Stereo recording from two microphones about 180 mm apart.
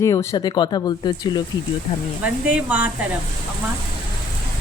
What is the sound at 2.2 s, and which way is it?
Speech, 10° right (ahead or behind).